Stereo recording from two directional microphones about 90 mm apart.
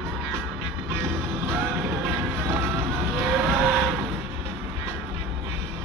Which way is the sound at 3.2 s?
5° left (ahead or behind).